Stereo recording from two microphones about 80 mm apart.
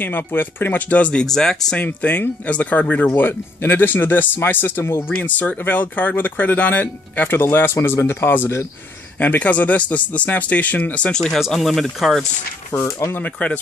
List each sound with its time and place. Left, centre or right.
0.0 s speech: left; by 1.8 s centre
1.8 s speech: centre
11.3 s speech: centre
12.7 s speech: left
13.1 s speech: centre